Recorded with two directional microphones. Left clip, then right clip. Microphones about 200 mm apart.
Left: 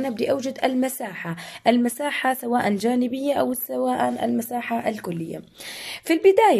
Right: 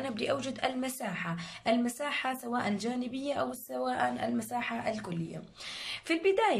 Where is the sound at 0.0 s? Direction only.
30° left (ahead or behind).